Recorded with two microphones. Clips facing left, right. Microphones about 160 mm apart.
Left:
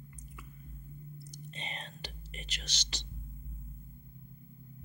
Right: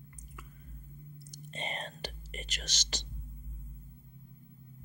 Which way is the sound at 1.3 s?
45° right (ahead or behind).